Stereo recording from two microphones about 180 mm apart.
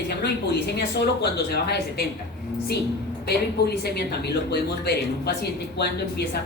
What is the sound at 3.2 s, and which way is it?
A woman's voice, 65° left (ahead or behind).